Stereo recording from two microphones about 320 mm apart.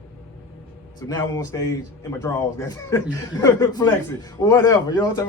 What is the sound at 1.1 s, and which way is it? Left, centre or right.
A man's voice, centre.